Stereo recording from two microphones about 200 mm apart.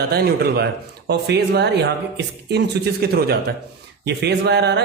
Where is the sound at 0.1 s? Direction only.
50° right (ahead or behind).